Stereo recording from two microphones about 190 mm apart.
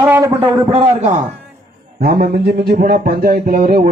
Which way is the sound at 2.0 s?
50° right (ahead or behind).